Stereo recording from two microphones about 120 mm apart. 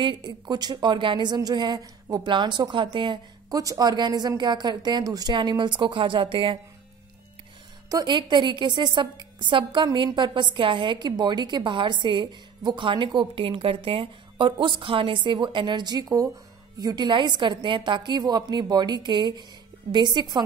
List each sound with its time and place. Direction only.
0.0 s a woman's voice: 40° right (ahead or behind)
7.9 s a woman's voice: 40° right (ahead or behind)